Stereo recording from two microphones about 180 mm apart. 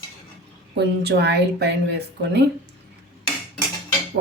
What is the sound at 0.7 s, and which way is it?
Speech, 70° right (ahead or behind).